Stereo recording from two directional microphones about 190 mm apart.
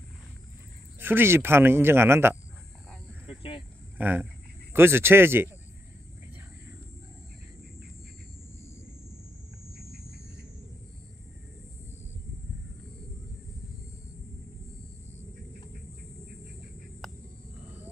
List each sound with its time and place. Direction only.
0.9 s a man's voice: 10° right (ahead or behind)
3.3 s cricket: 30° left (ahead or behind)
4.0 s a man's voice: 10° right (ahead or behind)